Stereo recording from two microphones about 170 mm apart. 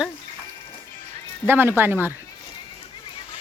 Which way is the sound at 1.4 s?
10° right (ahead or behind).